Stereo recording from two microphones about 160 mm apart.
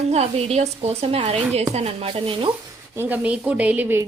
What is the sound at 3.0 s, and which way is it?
Speech, 10° right (ahead or behind).